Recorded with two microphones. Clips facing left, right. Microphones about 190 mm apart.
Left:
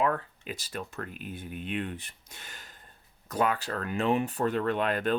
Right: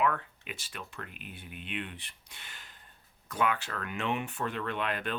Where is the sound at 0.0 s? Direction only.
35° left (ahead or behind).